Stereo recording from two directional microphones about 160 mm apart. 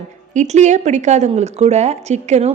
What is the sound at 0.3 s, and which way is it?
Speech, 45° right (ahead or behind).